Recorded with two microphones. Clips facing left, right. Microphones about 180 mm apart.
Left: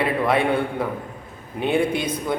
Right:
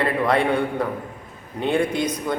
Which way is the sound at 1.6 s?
5° left (ahead or behind).